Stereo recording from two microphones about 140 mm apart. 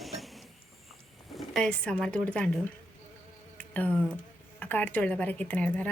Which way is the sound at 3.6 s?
10° left (ahead or behind).